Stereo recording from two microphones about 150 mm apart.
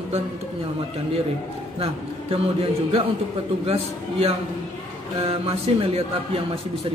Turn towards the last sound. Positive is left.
turn(degrees=-40)  # may be behind; listen again after turning